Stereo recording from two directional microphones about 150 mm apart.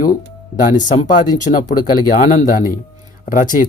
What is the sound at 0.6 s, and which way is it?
Speech, 60° left (ahead or behind).